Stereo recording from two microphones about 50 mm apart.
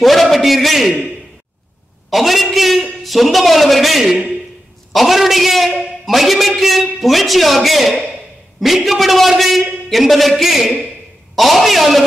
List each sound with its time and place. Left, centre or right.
0.0 s a man's voice: centre
2.0 s a man's voice: centre
8.1 s a sound: centre
8.7 s a man's voice: centre